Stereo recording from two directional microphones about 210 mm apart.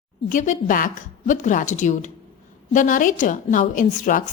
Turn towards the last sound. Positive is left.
turn(degrees=40)  # may be behind; listen again after turning